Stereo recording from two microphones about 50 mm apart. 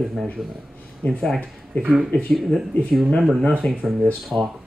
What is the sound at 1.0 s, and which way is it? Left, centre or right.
Speech, left.